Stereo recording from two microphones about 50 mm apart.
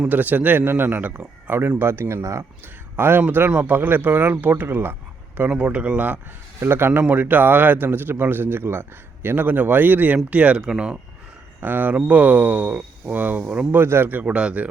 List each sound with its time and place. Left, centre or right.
0.1 s speech: right
1.5 s speech: right
2.9 s a man's voice: right
5.5 s a man's voice: centre
5.8 s speech: right
6.6 s a man's voice: right
7.1 s a man's voice: right
10.2 s a man's voice: right
11.6 s speech: right
13.7 s a man's voice: right
14.1 s a man's voice: right